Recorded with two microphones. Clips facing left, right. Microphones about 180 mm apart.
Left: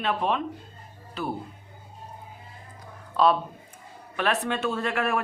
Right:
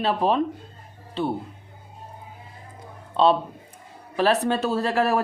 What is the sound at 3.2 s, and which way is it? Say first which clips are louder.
Speech: right 3 dB; 25° right (ahead or behind).